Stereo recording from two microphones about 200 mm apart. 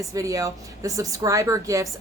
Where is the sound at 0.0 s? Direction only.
15° right (ahead or behind).